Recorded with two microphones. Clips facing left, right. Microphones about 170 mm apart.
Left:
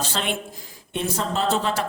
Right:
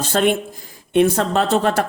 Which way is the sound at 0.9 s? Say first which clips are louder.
Right 10 dB; 60° right (ahead or behind).